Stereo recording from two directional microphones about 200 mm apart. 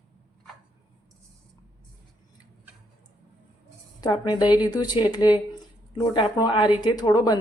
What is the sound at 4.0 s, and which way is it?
Speech, 20° left (ahead or behind).